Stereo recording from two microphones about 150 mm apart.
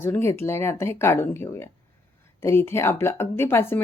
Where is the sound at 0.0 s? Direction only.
15° left (ahead or behind).